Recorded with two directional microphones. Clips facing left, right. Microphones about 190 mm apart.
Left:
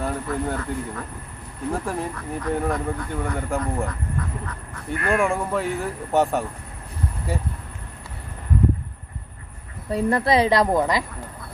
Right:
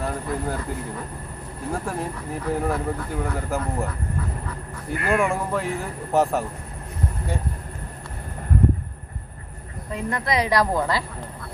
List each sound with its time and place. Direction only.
0.0 s speech: centre (ahead or behind)
1.7 s speech: centre (ahead or behind)
9.9 s speech: 35° left (ahead or behind)